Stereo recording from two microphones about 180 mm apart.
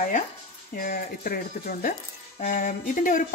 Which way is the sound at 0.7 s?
55° left (ahead or behind).